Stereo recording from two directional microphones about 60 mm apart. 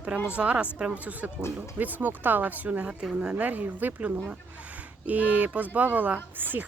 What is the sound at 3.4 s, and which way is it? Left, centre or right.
A woman's voice, right.